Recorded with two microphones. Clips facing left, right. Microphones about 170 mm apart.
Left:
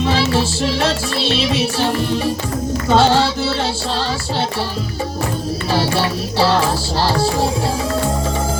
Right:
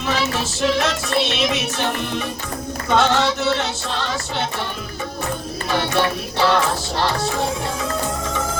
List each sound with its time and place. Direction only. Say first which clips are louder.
0.0 s music: left 6 dB; 30° left (ahead or behind)
5.7 s music: left 1 dB; 30° left (ahead or behind)